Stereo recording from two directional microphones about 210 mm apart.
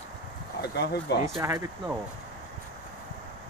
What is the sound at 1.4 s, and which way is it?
Speech, 15° right (ahead or behind).